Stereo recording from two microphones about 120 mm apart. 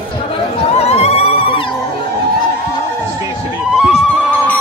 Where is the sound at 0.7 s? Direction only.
60° left (ahead or behind).